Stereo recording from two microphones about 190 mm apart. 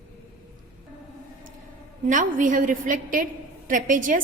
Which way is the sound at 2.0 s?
40° right (ahead or behind).